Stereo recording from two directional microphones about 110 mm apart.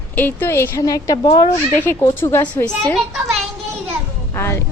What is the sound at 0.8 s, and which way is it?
Speech, 35° left (ahead or behind).